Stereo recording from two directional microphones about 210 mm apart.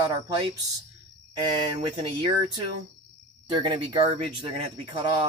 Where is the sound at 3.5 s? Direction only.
20° right (ahead or behind).